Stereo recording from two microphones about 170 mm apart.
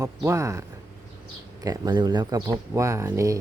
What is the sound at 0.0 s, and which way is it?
Speech, 20° right (ahead or behind).